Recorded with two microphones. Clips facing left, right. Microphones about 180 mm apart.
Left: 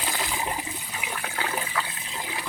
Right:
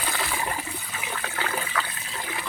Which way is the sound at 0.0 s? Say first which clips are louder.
Right 1 dB; 15° left (ahead or behind).